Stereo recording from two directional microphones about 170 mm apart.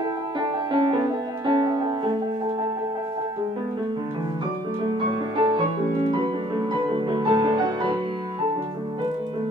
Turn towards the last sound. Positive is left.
turn(degrees=-25)  # may be behind; listen again after turning